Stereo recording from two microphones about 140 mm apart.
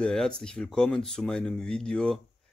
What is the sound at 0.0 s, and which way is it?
Speech, 5° left (ahead or behind).